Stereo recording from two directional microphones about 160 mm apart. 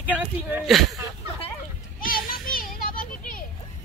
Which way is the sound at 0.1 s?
10° right (ahead or behind).